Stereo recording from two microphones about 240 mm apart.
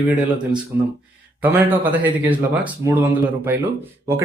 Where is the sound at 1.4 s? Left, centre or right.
Centre.